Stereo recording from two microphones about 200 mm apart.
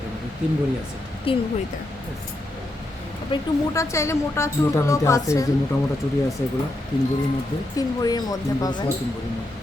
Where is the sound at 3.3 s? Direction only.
25° left (ahead or behind).